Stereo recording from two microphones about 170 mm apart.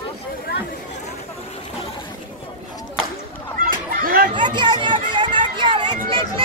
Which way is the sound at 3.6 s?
55° right (ahead or behind).